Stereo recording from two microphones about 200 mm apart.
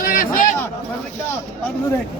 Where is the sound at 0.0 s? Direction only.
45° left (ahead or behind).